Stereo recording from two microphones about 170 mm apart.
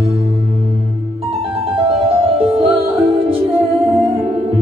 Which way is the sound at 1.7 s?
35° right (ahead or behind).